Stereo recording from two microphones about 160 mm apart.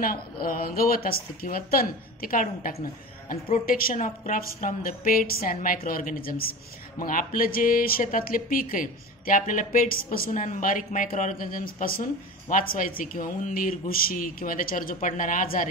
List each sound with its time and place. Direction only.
0.0 s speech: 65° left (ahead or behind)